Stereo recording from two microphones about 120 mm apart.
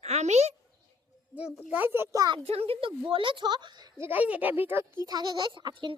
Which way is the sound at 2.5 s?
55° right (ahead or behind).